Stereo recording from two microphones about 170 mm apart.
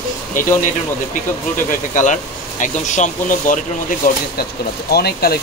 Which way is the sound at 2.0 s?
45° left (ahead or behind).